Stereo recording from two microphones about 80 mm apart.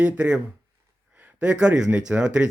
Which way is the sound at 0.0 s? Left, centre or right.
Centre.